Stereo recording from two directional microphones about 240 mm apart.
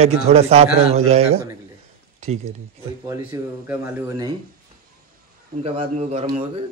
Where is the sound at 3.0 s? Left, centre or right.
Centre.